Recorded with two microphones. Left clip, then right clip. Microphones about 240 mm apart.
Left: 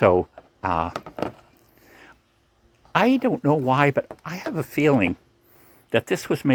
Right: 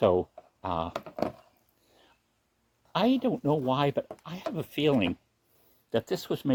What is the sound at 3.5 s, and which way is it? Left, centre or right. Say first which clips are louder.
Speech: left 7 dB; left.